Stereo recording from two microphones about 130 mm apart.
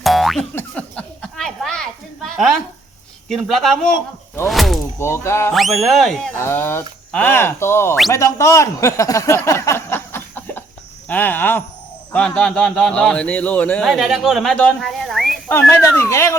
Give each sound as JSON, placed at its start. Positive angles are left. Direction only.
{"t": 0.0, "sound": "boing", "side_deg": 0}
{"t": 0.5, "sound": "a sound", "side_deg": 10}
{"t": 3.2, "sound": "speech", "side_deg": 0}
{"t": 4.9, "sound": "speech", "side_deg": 20}
{"t": 5.5, "sound": "speech", "side_deg": 0}
{"t": 6.3, "sound": "a man's voice", "side_deg": 20}
{"t": 13.8, "sound": "speech", "side_deg": 0}
{"t": 15.7, "sound": "speech", "side_deg": 20}